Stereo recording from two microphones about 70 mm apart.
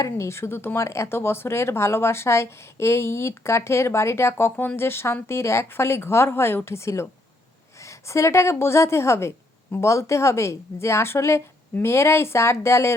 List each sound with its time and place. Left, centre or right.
0.0 s a woman's voice: left